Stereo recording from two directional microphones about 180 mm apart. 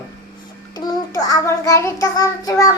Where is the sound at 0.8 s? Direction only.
20° left (ahead or behind).